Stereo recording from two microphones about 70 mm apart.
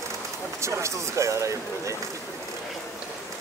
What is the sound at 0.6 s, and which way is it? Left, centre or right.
Speech, right.